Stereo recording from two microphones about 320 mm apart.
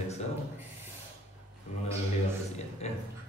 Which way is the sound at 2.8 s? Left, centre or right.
Centre.